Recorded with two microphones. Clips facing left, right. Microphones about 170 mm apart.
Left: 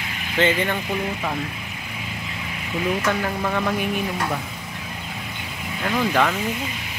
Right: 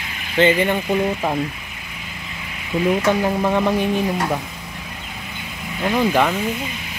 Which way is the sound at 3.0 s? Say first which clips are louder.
Right 5 dB; 20° right (ahead or behind).